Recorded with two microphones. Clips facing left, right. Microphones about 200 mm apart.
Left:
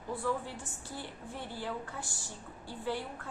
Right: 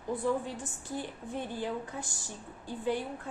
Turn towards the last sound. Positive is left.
turn(degrees=-15)  # may be behind; listen again after turning